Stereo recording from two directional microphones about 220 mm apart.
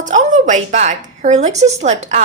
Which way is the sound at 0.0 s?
35° right (ahead or behind).